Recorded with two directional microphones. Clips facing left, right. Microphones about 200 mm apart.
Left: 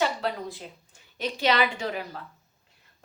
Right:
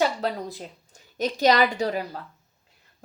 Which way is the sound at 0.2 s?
40° right (ahead or behind).